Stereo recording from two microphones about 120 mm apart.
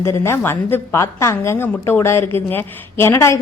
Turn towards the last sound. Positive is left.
turn(degrees=25)  # may be behind; listen again after turning